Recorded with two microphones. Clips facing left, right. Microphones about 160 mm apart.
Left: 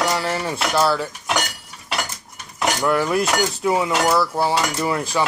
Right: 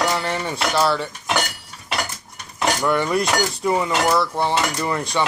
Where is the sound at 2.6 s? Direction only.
Centre (ahead or behind).